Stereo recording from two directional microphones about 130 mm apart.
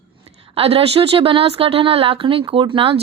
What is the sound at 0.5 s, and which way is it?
A woman's voice, 45° right (ahead or behind).